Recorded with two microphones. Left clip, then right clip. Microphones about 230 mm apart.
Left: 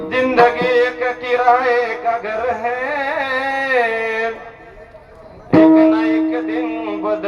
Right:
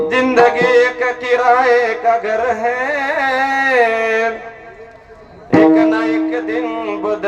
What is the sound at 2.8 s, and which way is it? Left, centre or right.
Carnatic music, right.